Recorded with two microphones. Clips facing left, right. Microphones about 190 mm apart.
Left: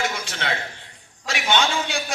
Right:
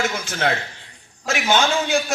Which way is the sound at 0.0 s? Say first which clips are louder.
Right 5 dB; 45° right (ahead or behind).